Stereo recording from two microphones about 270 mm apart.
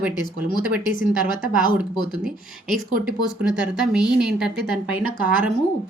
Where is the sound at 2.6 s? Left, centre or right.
Centre.